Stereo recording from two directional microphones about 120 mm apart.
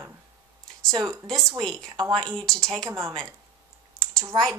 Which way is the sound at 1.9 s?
40° right (ahead or behind).